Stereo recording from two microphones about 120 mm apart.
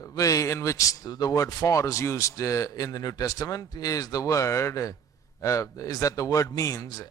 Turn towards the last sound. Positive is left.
turn(degrees=30)  # may be behind; listen again after turning